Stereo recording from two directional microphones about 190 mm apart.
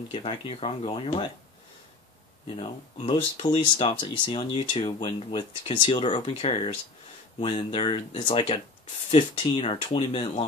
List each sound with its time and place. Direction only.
0.1 s speech: 30° left (ahead or behind)
2.5 s speech: 25° left (ahead or behind)